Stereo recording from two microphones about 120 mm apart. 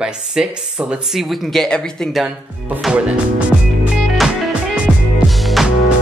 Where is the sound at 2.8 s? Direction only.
10° right (ahead or behind).